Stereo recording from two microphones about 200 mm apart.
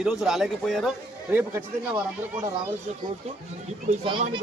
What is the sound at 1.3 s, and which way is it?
Speech, 10° right (ahead or behind).